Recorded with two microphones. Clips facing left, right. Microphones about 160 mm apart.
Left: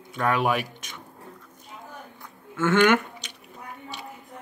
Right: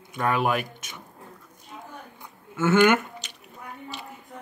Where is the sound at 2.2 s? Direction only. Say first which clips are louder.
Even; 5° right (ahead or behind).